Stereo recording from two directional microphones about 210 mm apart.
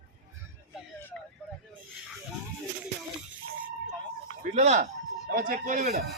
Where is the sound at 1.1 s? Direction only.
5° left (ahead or behind).